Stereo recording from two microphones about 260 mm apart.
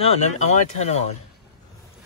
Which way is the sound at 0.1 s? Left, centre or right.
Left.